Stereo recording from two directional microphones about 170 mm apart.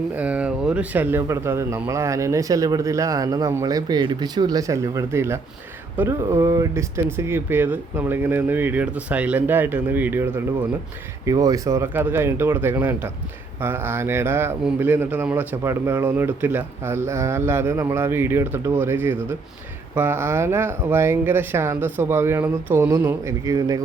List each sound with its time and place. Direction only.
0.2 s a man's voice: 5° right (ahead or behind)